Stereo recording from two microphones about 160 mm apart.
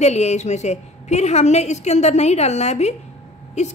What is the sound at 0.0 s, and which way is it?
A woman's voice, 45° left (ahead or behind).